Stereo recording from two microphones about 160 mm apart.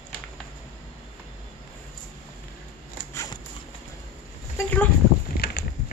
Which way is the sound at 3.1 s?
20° left (ahead or behind).